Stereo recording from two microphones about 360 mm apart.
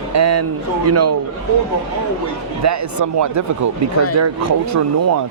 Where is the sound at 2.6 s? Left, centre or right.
Right.